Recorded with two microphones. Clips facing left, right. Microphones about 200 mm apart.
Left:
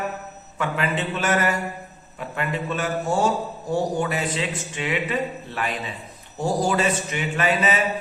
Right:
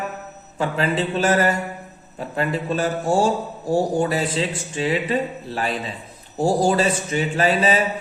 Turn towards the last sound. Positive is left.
turn(degrees=-30)  # may be behind; listen again after turning